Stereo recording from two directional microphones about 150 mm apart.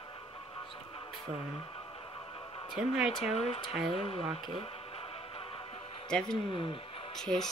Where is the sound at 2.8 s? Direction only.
5° right (ahead or behind).